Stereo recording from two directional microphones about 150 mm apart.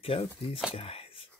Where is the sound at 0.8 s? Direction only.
40° left (ahead or behind).